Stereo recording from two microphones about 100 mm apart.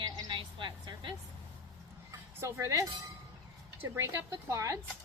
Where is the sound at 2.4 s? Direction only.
30° right (ahead or behind).